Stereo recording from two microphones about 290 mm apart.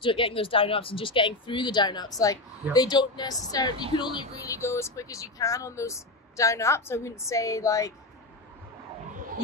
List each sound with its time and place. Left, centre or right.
0.0 s speech: centre